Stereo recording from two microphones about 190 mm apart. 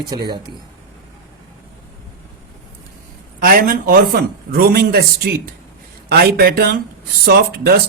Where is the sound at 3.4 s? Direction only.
50° right (ahead or behind).